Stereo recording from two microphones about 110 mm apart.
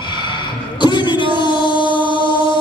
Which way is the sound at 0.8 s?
45° left (ahead or behind).